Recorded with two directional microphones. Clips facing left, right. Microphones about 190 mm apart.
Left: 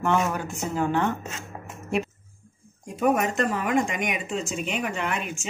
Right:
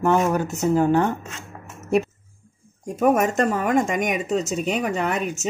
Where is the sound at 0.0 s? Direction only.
40° right (ahead or behind).